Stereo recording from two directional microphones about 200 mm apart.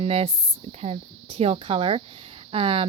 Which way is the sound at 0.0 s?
30° right (ahead or behind).